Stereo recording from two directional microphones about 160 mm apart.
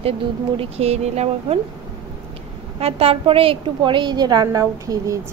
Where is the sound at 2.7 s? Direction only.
40° right (ahead or behind).